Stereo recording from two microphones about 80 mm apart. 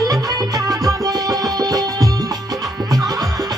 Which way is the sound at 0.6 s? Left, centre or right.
Right.